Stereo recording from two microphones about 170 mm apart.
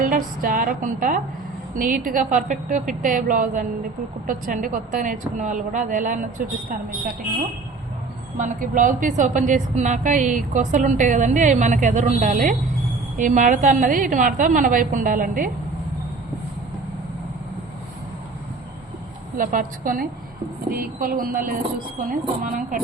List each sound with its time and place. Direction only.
0.0 s a woman's voice: 55° right (ahead or behind)
8.4 s a woman's voice: 50° right (ahead or behind)
19.4 s a woman's voice: 50° right (ahead or behind)